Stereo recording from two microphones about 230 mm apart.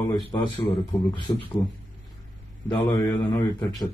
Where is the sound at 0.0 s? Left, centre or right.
Left.